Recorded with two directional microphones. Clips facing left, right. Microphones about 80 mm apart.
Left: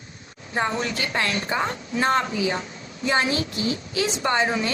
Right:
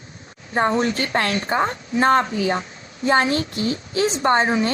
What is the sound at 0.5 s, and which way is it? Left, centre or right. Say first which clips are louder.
A woman's voice: right 6 dB; right.